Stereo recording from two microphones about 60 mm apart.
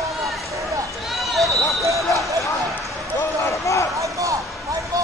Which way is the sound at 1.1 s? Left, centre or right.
Centre.